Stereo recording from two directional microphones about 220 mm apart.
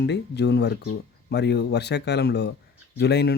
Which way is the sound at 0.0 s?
50° left (ahead or behind).